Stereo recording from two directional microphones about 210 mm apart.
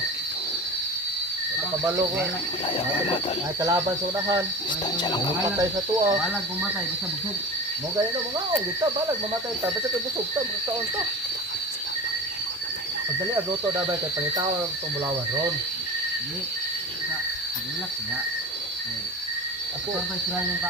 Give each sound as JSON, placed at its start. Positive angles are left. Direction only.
{"t": 3.6, "sound": "speech", "side_deg": -15}
{"t": 4.9, "sound": "speech", "side_deg": 20}
{"t": 5.5, "sound": "speech", "side_deg": -20}